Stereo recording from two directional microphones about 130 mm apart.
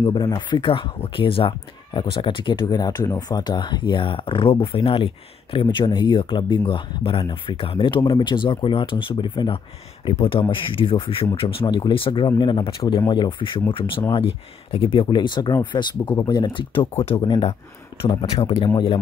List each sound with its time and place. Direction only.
0.0 s speech: 40° left (ahead or behind)
17.0 s speech: 50° left (ahead or behind)